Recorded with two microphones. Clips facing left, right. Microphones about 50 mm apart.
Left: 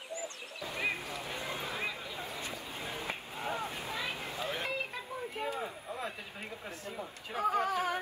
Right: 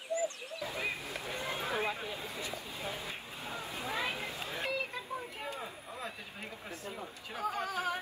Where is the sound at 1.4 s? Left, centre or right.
Right.